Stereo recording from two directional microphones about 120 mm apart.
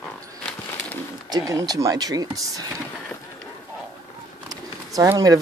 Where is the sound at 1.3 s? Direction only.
30° right (ahead or behind).